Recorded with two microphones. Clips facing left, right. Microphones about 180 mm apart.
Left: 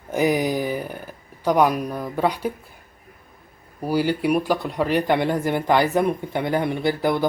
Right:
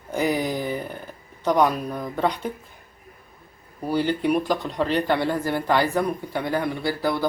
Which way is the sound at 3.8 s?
10° left (ahead or behind).